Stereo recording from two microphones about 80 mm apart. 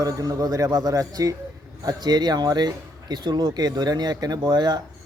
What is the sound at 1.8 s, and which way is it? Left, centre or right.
Speech, right.